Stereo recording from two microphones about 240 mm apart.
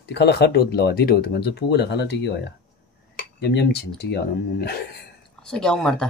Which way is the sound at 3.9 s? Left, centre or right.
Left.